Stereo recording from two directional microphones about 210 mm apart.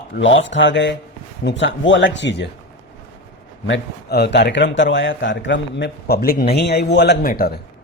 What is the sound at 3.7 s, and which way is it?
A man's voice, 55° left (ahead or behind).